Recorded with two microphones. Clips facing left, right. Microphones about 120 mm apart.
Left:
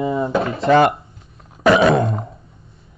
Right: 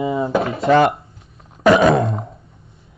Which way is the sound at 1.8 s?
Centre (ahead or behind).